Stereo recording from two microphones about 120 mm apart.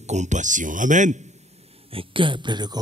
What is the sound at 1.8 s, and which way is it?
Speech, 50° right (ahead or behind).